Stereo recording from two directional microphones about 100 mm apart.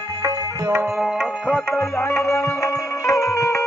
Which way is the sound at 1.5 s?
20° left (ahead or behind).